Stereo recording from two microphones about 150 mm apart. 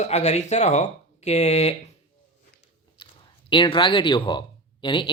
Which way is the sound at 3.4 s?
35° left (ahead or behind).